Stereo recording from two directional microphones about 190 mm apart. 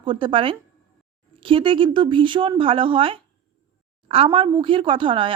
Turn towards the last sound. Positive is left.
turn(degrees=-25)  # may be behind; listen again after turning